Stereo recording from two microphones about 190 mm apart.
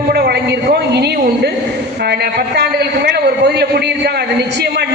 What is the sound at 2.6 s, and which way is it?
A man's voice, 60° right (ahead or behind).